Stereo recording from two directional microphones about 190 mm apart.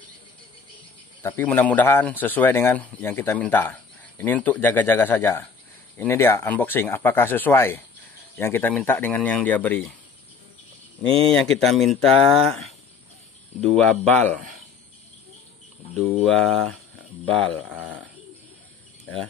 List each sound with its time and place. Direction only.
1.2 s speech: 10° left (ahead or behind)
11.1 s speech: 30° right (ahead or behind)
11.3 s speech: centre (ahead or behind)
16.0 s speech: centre (ahead or behind)